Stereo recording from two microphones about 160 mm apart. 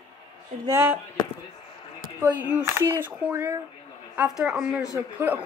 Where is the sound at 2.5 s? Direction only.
15° right (ahead or behind).